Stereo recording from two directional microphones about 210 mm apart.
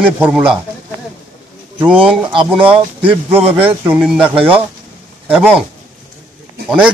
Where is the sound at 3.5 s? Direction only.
5° right (ahead or behind).